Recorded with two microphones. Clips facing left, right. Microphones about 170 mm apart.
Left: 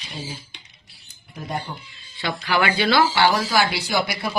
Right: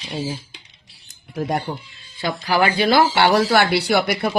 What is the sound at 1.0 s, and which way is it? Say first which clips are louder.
Camera: right 9 dB; 80° right.